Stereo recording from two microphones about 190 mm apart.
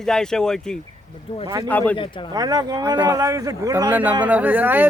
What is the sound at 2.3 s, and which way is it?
Speech, 20° right (ahead or behind).